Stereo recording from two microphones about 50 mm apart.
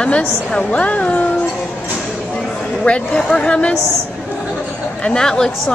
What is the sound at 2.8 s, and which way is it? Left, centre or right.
Speech, left.